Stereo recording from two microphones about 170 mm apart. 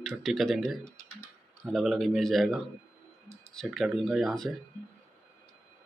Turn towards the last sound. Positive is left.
turn(degrees=0)  # may be behind; listen again after turning